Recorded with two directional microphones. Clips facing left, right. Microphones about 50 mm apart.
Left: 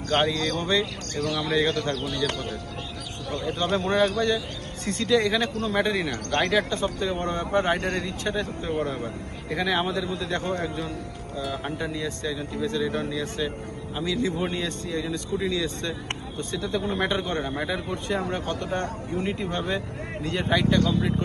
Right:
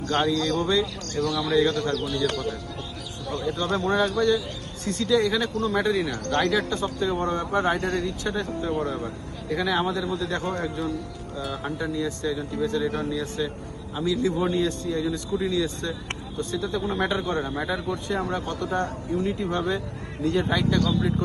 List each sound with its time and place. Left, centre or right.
0.1 s a man's voice: left